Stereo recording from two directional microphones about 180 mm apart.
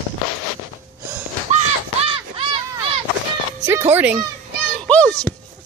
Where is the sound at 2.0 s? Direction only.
30° right (ahead or behind).